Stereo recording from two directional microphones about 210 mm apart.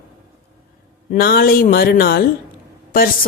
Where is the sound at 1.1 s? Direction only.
45° left (ahead or behind).